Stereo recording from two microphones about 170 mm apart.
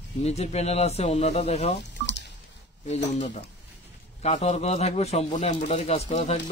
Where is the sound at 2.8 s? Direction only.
40° left (ahead or behind).